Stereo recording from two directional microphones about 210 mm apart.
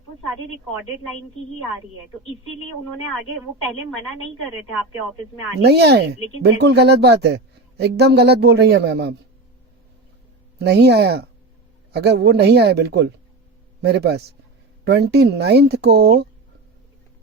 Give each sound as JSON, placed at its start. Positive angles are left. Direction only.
{"t": 5.6, "sound": "speech", "side_deg": -50}
{"t": 10.6, "sound": "speech", "side_deg": -50}